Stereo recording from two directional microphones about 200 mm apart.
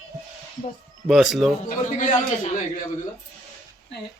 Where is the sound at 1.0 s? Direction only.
Centre (ahead or behind).